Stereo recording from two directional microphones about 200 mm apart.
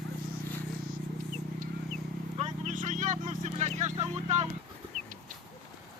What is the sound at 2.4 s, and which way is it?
Vehicle, 35° right (ahead or behind).